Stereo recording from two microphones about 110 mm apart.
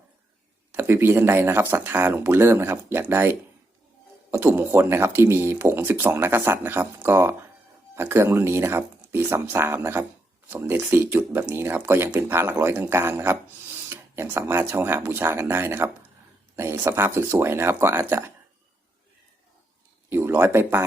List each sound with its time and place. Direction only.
0.7 s speech: 20° right (ahead or behind)
20.1 s speech: 20° right (ahead or behind)